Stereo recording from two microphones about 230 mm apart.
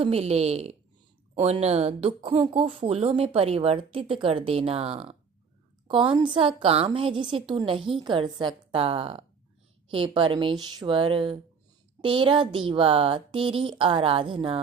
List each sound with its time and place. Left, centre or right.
0.0 s speech: right